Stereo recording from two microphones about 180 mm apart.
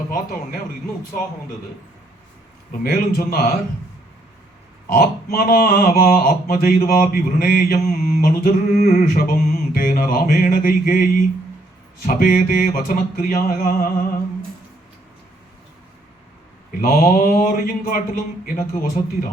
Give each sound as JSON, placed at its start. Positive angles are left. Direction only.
{"t": 2.8, "sound": "speech", "side_deg": 55}
{"t": 4.9, "sound": "speech", "side_deg": 55}
{"t": 6.8, "sound": "mantra", "side_deg": 55}
{"t": 16.8, "sound": "mantra", "side_deg": 55}